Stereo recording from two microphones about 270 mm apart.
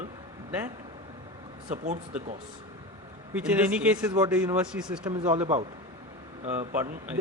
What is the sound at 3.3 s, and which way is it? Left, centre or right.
Speech, centre.